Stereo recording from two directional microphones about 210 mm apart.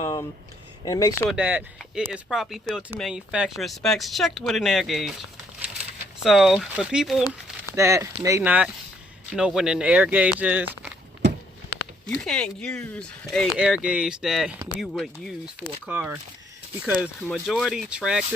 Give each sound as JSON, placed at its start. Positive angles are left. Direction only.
{"t": 0.0, "sound": "a sound", "side_deg": 15}
{"t": 0.9, "sound": "speech", "side_deg": 15}
{"t": 1.3, "sound": "speech", "side_deg": -5}
{"t": 6.2, "sound": "speech", "side_deg": 0}
{"t": 7.8, "sound": "speech", "side_deg": -15}
{"t": 12.0, "sound": "speech", "side_deg": 5}
{"t": 17.2, "sound": "speech", "side_deg": 0}